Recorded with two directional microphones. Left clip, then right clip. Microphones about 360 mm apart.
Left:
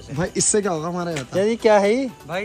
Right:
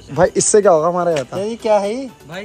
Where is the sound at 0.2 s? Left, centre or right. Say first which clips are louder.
Right 9 dB; centre.